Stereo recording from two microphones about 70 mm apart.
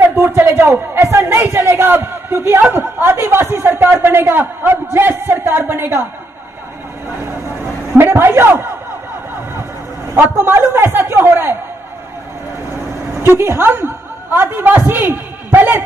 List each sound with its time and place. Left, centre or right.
0.3 s speech: right
8.0 s a man's voice: right
10.1 s speech: right
13.2 s a man's voice: right